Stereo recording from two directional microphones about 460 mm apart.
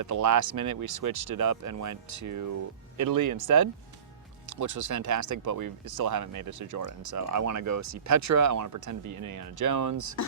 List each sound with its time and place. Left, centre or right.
0.0 s speech: right